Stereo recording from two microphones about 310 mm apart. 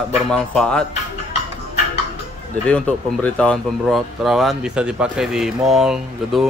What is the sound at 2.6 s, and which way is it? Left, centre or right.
Speech, centre.